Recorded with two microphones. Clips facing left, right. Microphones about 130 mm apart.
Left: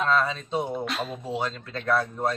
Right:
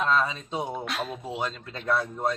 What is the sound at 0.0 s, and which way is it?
Speech, 10° right (ahead or behind).